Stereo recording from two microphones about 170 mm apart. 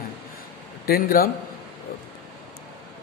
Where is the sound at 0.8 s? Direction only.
60° left (ahead or behind).